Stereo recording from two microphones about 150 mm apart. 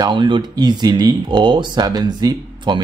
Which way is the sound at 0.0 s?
30° right (ahead or behind).